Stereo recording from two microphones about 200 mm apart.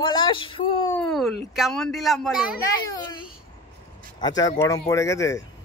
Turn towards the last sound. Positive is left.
turn(degrees=15)  # may be behind; listen again after turning